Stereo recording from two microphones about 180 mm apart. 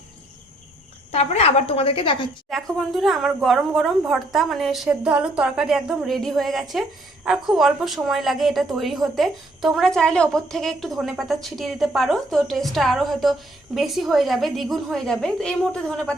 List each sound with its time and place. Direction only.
1.1 s a woman's voice: 35° left (ahead or behind)
2.5 s a woman's voice: centre (ahead or behind)